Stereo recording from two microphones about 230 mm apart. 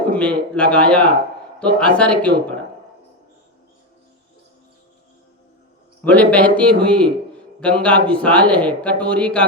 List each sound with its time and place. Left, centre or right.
0.1 s a sound: centre
0.5 s a man's voice: centre
6.1 s a man's voice: centre
6.7 s speech: right
7.3 s a man's voice: centre